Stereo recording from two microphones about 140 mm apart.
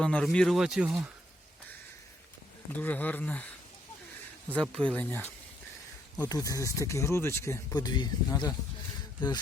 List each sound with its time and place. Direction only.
0.0 s speech: 5° left (ahead or behind)
2.7 s speech: 10° left (ahead or behind)
6.2 s speech: 25° left (ahead or behind)
7.8 s speech: 30° left (ahead or behind)